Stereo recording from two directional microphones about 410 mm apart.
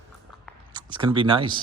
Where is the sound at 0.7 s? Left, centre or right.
Centre.